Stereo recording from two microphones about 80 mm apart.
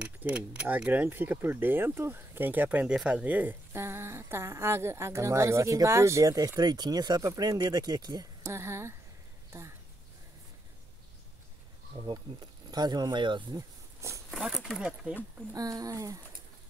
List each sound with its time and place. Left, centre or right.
0.0 s speech: centre
3.8 s speech: right
6.3 s speech: right
8.4 s speech: right
12.0 s speech: right
13.6 s a sound: right
14.3 s speech: centre
15.5 s speech: right